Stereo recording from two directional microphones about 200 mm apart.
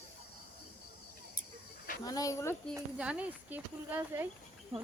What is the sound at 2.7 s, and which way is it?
Speech, 5° right (ahead or behind).